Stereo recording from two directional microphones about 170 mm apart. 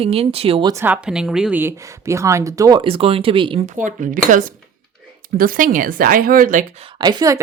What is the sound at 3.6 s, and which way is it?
Speech, 45° right (ahead or behind).